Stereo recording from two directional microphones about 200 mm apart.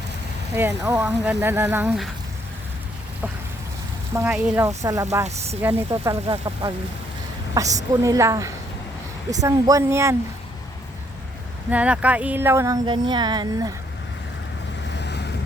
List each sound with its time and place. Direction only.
0.5 s speech: 15° right (ahead or behind)
1.0 s speech: 5° right (ahead or behind)
4.1 s speech: 10° right (ahead or behind)
6.2 s speech: 25° right (ahead or behind)
11.7 s speech: 5° right (ahead or behind)
14.9 s boat: 55° left (ahead or behind)